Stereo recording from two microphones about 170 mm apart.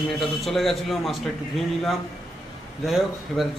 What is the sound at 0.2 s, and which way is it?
A woman's voice, centre (ahead or behind).